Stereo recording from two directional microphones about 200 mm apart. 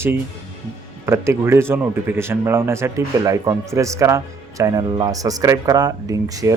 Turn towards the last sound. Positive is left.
turn(degrees=-15)  # may be behind; listen again after turning